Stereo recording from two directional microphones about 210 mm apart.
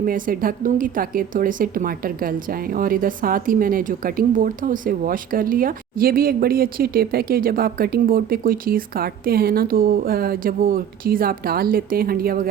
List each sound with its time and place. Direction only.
0.0 s a woman's voice: 40° right (ahead or behind)